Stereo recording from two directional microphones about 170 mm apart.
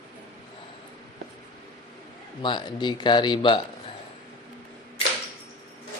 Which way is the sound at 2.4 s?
30° left (ahead or behind).